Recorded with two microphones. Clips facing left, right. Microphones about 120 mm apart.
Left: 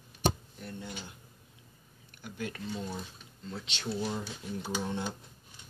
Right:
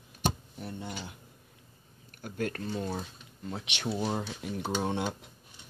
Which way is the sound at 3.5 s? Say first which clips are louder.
Right 2 dB; 70° right (ahead or behind).